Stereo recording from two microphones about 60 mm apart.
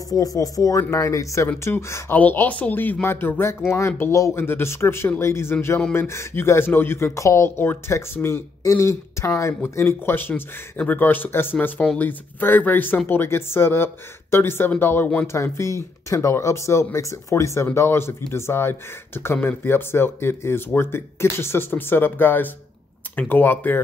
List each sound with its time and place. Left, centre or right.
0.1 s speech: left
2.0 s speech: left
3.7 s speech: left
4.4 s speech: left
7.0 s speech: left
8.6 s speech: left
9.8 s speech: left
15.2 s speech: left
17.7 s speech: left